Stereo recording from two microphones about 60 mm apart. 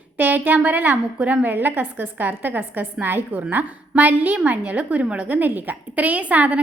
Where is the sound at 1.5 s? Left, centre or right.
Right.